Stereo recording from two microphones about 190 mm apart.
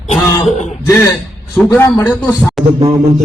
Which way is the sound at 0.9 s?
15° left (ahead or behind).